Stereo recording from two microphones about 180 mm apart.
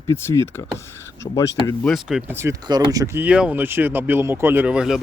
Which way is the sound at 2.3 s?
15° right (ahead or behind).